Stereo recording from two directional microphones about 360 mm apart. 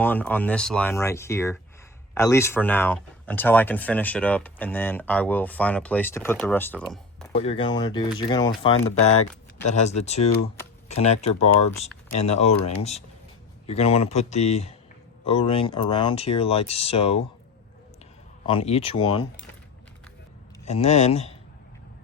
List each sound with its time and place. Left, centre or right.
0.0 s speech: centre
7.3 s speech: centre
18.4 s speech: centre
20.7 s speech: centre